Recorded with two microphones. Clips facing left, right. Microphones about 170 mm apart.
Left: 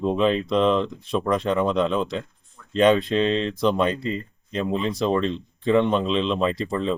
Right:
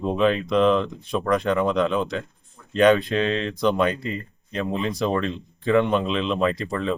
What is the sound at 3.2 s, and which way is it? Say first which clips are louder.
Speech: left 1 dB; 30° left (ahead or behind).